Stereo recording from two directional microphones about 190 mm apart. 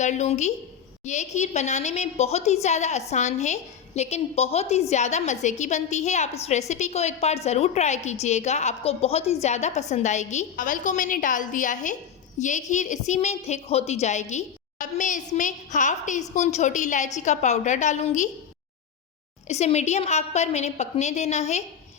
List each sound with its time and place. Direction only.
0.0 s a woman's voice: 35° left (ahead or behind)
19.5 s a woman's voice: 35° left (ahead or behind)